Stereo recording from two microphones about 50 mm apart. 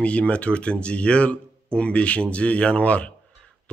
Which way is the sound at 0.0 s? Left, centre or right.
Left.